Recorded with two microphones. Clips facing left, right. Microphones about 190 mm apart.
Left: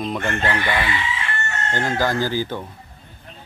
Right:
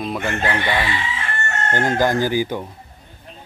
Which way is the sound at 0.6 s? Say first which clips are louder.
Right 1 dB; 25° right (ahead or behind).